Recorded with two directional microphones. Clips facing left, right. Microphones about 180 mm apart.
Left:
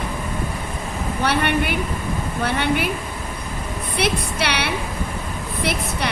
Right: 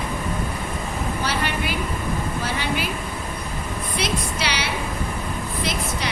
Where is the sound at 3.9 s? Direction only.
60° left (ahead or behind).